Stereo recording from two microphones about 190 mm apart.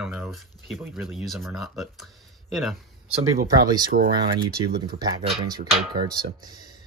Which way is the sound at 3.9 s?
55° right (ahead or behind).